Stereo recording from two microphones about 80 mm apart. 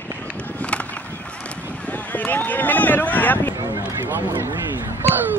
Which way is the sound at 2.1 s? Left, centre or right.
Left.